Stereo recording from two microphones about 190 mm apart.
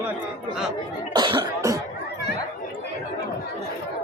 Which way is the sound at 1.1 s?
25° right (ahead or behind).